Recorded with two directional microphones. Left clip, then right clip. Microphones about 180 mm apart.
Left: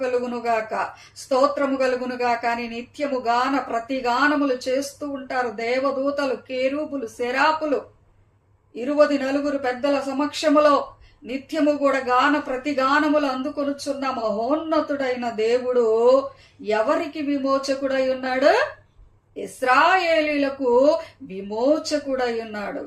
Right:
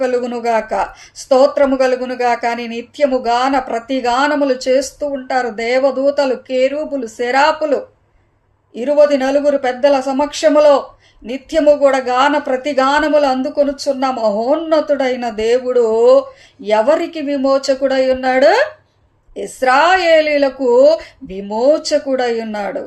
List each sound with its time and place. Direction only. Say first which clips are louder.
0.0 s speech: right 7 dB; 50° right (ahead or behind)
8.7 s speech: right 8 dB; 45° right (ahead or behind)